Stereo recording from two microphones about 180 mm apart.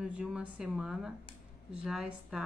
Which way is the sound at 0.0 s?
5° right (ahead or behind).